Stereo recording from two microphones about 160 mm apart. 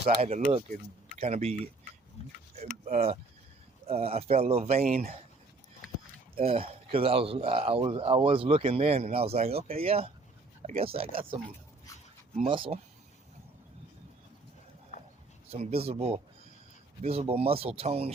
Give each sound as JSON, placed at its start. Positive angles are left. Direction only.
{"t": 0.0, "sound": "a man's voice", "side_deg": -40}
{"t": 2.8, "sound": "a man's voice", "side_deg": -45}
{"t": 6.3, "sound": "a man's voice", "side_deg": -35}
{"t": 15.4, "sound": "a man's voice", "side_deg": -40}